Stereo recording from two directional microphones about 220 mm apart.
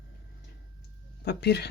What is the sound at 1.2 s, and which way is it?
Speech, 50° left (ahead or behind).